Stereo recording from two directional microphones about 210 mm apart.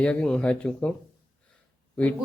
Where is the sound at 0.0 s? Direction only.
5° left (ahead or behind).